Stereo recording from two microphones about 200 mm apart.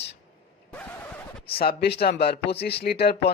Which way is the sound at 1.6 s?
50° left (ahead or behind).